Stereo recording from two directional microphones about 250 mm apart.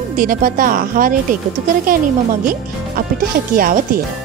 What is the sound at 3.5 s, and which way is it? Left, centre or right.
Speech, right.